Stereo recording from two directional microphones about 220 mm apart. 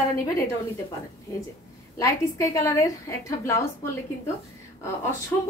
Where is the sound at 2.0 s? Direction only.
15° left (ahead or behind).